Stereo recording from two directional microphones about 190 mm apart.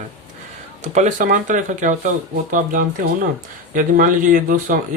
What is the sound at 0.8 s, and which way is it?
Speech, 40° right (ahead or behind).